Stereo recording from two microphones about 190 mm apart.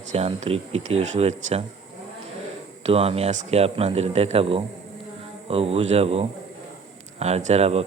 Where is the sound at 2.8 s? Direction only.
30° right (ahead or behind).